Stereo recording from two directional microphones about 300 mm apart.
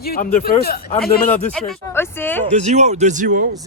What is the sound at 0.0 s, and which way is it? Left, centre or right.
A man's voice, left.